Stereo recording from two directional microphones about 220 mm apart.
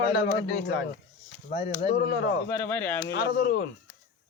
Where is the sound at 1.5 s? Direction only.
30° left (ahead or behind).